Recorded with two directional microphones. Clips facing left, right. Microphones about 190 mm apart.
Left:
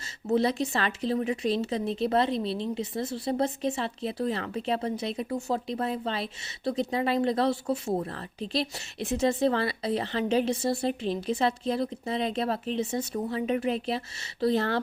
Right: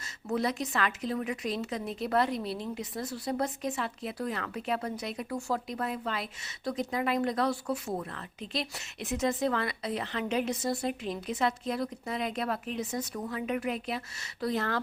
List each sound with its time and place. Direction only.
0.3 s speech: 30° left (ahead or behind)